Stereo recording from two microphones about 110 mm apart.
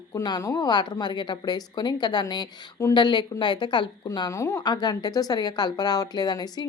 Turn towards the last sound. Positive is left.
turn(degrees=40)  # may be behind; listen again after turning